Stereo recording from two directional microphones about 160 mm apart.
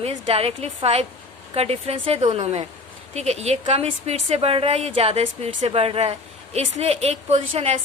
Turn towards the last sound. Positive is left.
turn(degrees=-45)  # may be behind; listen again after turning